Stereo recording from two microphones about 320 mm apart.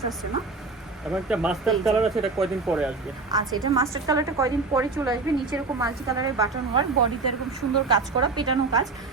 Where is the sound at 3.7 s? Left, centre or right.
Centre.